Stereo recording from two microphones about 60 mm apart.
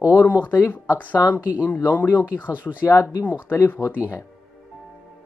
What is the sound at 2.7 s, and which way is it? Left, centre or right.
Speech, left.